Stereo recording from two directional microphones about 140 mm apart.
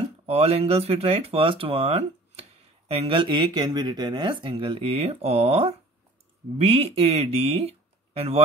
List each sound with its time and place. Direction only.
0.3 s speech: 45° right (ahead or behind)